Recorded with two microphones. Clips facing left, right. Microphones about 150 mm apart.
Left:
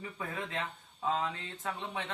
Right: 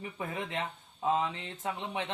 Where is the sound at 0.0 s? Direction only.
20° right (ahead or behind).